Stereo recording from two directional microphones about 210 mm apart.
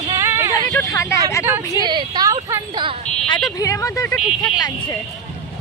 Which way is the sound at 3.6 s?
15° left (ahead or behind).